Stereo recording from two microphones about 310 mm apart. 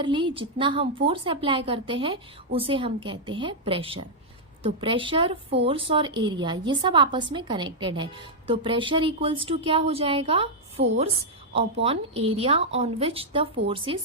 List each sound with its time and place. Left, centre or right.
0.0 s a woman's voice: centre